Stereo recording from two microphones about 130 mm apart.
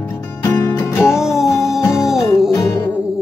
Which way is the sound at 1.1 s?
5° right (ahead or behind).